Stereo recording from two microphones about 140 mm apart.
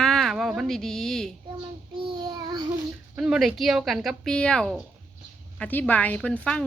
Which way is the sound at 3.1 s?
5° right (ahead or behind).